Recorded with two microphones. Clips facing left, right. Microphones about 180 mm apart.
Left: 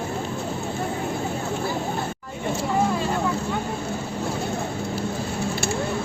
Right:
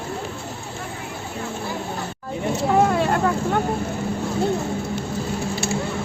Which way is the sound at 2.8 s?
65° right (ahead or behind).